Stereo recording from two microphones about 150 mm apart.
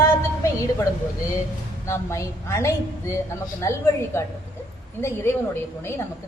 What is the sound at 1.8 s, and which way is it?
A woman's voice, 20° left (ahead or behind).